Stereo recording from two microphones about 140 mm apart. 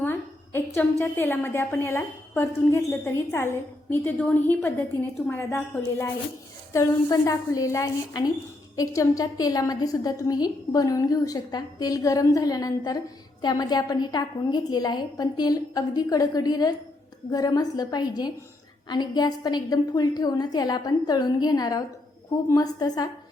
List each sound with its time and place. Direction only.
0.0 s a woman's voice: 15° left (ahead or behind)